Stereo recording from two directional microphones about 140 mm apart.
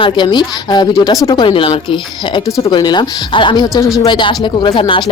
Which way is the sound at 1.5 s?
40° left (ahead or behind).